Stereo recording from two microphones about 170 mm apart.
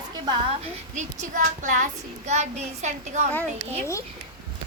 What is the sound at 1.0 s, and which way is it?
Speech, 50° right (ahead or behind).